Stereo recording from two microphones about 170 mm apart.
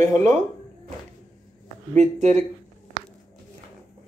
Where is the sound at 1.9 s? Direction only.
40° right (ahead or behind).